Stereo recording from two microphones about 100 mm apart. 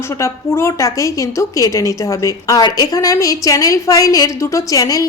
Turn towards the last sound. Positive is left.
turn(degrees=35)  # may be behind; listen again after turning